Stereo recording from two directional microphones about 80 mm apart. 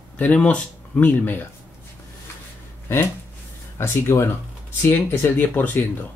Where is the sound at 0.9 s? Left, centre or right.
Left.